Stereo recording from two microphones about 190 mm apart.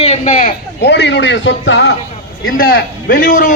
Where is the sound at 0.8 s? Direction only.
65° left (ahead or behind).